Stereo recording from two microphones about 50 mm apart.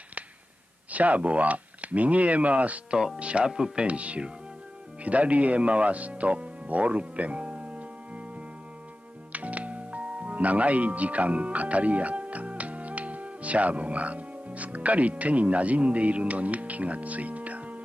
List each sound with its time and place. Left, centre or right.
0.9 s speech: right
3.4 s speech: centre
3.8 s speech: right
9.3 s speech: right